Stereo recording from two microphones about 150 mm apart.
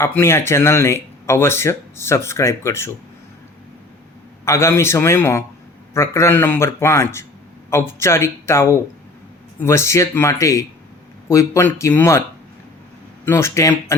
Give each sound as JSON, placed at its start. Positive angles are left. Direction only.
{"t": 0.2, "sound": "speech", "side_deg": 15}
{"t": 4.4, "sound": "speech", "side_deg": 20}
{"t": 13.2, "sound": "speech", "side_deg": 20}